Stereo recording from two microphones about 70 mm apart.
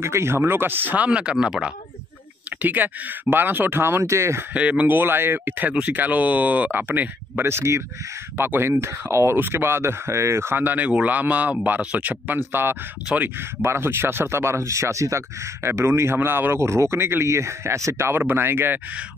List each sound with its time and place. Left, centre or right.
0.0 s speech: right; by 1.7 s centre
2.6 s speech: right
4.0 s speech: right
4.6 s speech: centre